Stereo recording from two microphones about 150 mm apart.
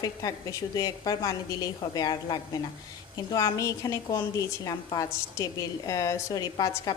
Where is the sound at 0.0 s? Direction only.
25° left (ahead or behind).